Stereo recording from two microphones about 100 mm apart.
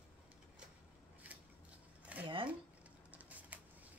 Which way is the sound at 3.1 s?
15° right (ahead or behind).